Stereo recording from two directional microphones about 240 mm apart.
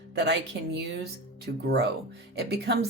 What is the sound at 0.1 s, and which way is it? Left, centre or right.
Speech, right.